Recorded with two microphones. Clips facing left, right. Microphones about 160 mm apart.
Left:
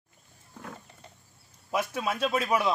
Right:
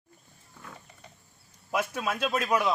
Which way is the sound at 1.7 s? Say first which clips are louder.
Even; 5° left (ahead or behind).